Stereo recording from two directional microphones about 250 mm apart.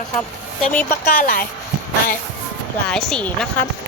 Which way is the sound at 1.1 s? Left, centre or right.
Left.